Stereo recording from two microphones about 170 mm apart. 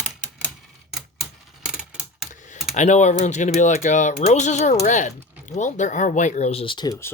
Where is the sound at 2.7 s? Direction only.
45° left (ahead or behind); by 6.9 s 30° left (ahead or behind).